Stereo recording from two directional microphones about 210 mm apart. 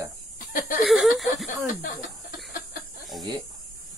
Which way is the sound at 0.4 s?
40° left (ahead or behind).